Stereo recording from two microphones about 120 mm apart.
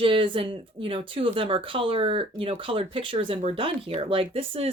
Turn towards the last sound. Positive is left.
turn(degrees=-50)  # may be behind; listen again after turning